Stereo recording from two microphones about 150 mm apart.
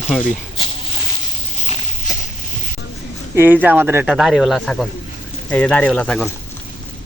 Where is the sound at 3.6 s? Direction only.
10° right (ahead or behind).